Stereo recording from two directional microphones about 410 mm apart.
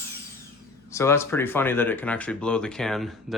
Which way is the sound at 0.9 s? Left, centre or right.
Centre.